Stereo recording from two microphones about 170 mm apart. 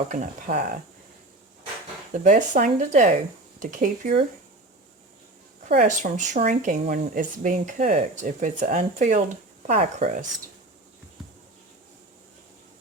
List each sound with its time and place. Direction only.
0.1 s speech: 55° right (ahead or behind)
2.1 s speech: 50° right (ahead or behind)
5.6 s speech: 50° right (ahead or behind)